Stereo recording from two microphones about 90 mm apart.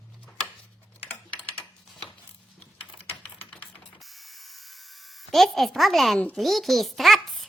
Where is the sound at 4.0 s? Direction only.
Centre (ahead or behind).